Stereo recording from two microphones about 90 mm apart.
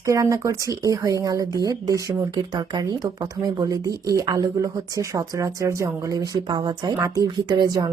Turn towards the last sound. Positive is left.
turn(degrees=-55)  # may be behind; listen again after turning